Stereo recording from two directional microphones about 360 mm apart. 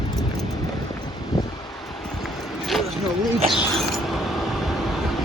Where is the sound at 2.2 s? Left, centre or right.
Centre.